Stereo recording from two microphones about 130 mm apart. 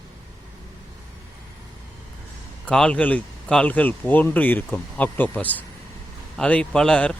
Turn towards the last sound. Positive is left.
turn(degrees=5)  # may be behind; listen again after turning